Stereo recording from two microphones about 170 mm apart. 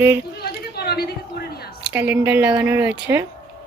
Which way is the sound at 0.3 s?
65° left (ahead or behind).